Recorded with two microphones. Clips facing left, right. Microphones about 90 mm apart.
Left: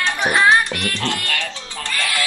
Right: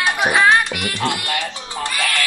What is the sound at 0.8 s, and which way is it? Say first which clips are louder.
Music: right 2 dB; 15° right (ahead or behind).